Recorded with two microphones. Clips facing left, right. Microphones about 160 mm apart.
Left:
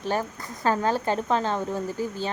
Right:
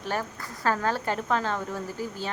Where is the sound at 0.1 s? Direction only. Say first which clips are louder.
Left 3 dB; 20° left (ahead or behind).